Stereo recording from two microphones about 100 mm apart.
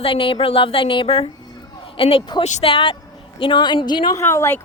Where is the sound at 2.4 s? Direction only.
80° left; by 4.1 s 50° left (ahead or behind).